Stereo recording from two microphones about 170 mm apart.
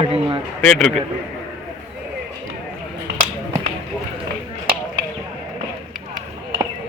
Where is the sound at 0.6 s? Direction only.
5° left (ahead or behind).